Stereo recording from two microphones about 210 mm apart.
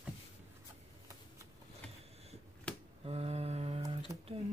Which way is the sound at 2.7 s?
5° left (ahead or behind).